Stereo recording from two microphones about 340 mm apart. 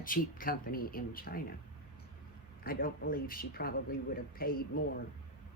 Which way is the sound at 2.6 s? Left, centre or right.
Left.